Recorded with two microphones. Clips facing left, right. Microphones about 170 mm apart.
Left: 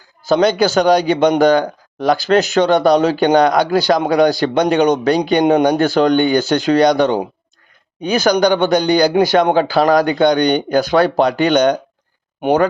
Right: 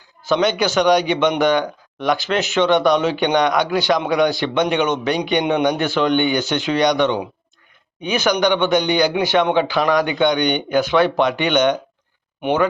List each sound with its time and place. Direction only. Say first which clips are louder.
0.3 s a man's voice: left 5 dB; 35° left (ahead or behind)